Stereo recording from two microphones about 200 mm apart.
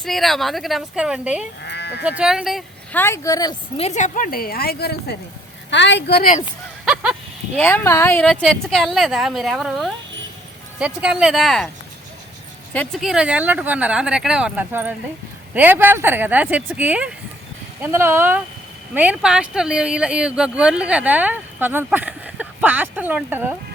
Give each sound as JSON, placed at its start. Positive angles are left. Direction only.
{"t": 0.0, "sound": "speech", "side_deg": 0}
{"t": 1.6, "sound": "sheep", "side_deg": 55}
{"t": 2.0, "sound": "speech", "side_deg": -5}
{"t": 3.0, "sound": "speech", "side_deg": 15}
{"t": 3.8, "sound": "a woman's voice", "side_deg": 35}
{"t": 6.8, "sound": "a sound", "side_deg": -5}
{"t": 7.7, "sound": "speech", "side_deg": 10}
{"t": 12.7, "sound": "speech", "side_deg": 5}